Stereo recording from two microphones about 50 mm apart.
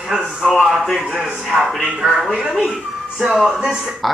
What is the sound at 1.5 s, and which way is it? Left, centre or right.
Speech, centre.